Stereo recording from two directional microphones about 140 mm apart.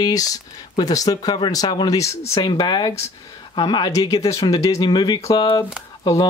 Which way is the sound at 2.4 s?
35° left (ahead or behind).